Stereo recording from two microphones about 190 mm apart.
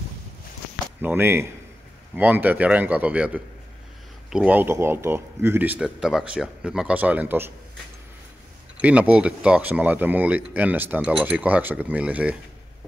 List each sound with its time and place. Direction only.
1.0 s speech: 10° right (ahead or behind)
8.8 s speech: 5° right (ahead or behind)